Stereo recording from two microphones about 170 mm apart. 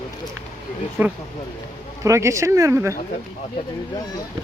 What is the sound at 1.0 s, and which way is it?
Speech, 10° right (ahead or behind).